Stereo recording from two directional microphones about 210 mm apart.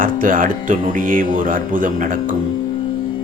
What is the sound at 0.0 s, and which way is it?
Speech, 40° right (ahead or behind).